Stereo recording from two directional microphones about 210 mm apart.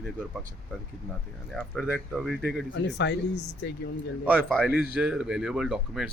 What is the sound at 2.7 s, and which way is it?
Speech, 55° left (ahead or behind).